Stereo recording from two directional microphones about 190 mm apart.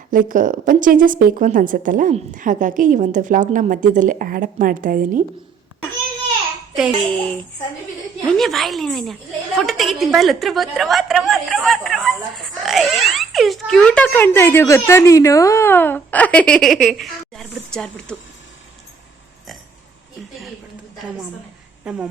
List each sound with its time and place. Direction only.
0.1 s a woman's voice: 45° right (ahead or behind)
7.1 s a woman's voice: 10° left (ahead or behind)
21.9 s a woman's voice: 5° right (ahead or behind)